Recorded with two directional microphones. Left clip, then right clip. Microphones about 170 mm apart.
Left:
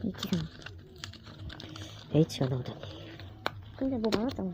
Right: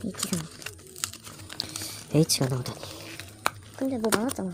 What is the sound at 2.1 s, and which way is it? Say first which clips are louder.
Speech: right 4 dB; 35° right (ahead or behind).